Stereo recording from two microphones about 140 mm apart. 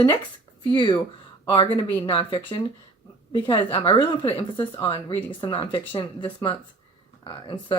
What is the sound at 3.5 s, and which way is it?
Speech, 35° left (ahead or behind).